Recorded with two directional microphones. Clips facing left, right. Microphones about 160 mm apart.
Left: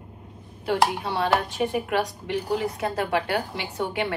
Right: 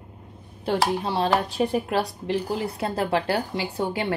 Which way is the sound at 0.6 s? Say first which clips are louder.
Even; 30° right (ahead or behind).